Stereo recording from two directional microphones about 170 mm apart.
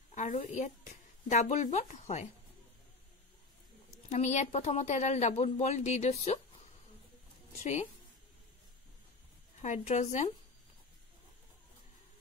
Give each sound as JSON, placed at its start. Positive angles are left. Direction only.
{"t": 0.1, "sound": "a woman's voice", "side_deg": 45}
{"t": 4.1, "sound": "speech", "side_deg": 45}
{"t": 9.6, "sound": "speech", "side_deg": 45}